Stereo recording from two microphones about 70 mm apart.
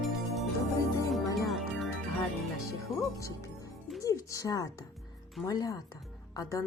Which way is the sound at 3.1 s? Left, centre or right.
Left.